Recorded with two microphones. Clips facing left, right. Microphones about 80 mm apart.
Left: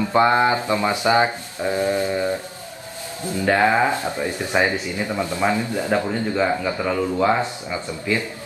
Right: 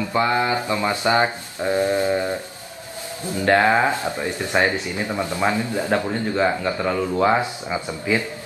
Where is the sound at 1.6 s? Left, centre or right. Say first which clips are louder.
Right 1 dB; right.